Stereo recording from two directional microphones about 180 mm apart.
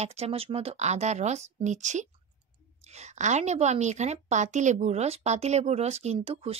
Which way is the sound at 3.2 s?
40° right (ahead or behind).